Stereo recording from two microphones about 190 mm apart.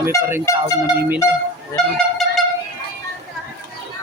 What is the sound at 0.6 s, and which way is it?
Speech, 10° right (ahead or behind).